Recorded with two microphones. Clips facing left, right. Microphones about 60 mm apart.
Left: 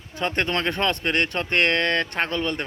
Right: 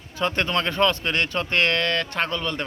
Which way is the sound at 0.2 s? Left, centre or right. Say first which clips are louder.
Right 1 dB; left.